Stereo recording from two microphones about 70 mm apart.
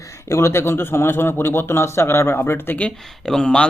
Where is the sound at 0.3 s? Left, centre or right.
Left.